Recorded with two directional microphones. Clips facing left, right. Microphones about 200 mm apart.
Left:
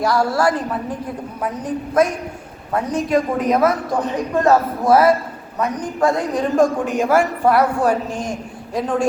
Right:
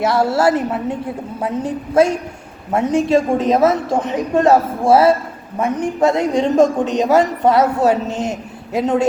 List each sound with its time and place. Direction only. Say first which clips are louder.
0.0 s a woman's voice: right 2 dB; 25° right (ahead or behind)